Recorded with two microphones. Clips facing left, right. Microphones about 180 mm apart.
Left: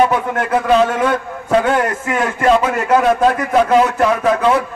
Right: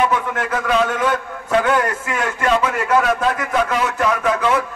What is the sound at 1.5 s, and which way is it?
A man's voice, 30° left (ahead or behind).